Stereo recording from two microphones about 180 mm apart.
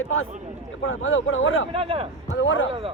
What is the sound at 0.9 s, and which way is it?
Speech, 90° left.